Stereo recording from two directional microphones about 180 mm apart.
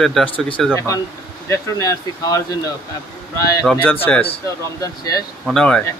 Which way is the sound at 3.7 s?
10° left (ahead or behind).